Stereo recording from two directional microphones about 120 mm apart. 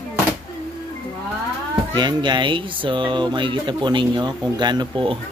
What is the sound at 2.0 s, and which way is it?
Speech, 40° right (ahead or behind).